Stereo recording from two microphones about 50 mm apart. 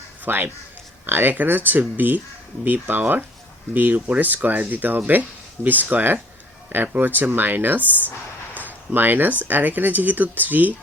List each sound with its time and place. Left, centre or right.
0.3 s speech: right
8.9 s speech: right